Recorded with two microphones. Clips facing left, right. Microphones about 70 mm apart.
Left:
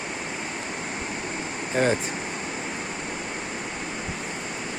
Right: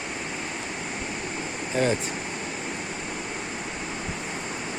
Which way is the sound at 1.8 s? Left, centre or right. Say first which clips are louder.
Left 2 dB; left.